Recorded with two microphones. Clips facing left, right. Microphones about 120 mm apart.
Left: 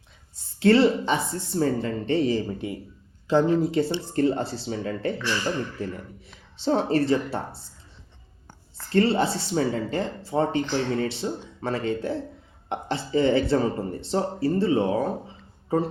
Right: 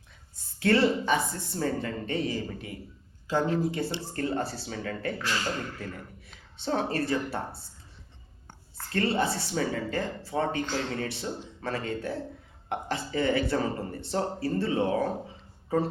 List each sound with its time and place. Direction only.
0.6 s speech: 25° left (ahead or behind)
9.1 s speech: 25° left (ahead or behind)